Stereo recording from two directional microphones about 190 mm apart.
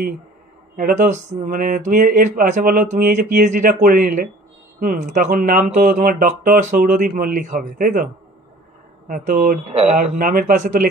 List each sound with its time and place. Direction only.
0.7 s speech: 45° right (ahead or behind)
9.7 s a man's voice: 30° right (ahead or behind)